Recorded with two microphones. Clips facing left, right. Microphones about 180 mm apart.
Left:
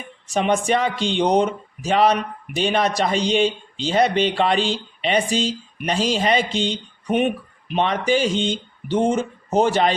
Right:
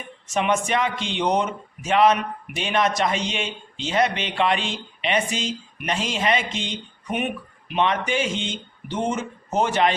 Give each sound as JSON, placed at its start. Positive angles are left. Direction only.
{"t": 0.3, "sound": "speech", "side_deg": 35}